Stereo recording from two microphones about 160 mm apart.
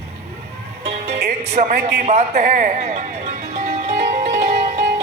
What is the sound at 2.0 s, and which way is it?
A man's voice, 45° right (ahead or behind).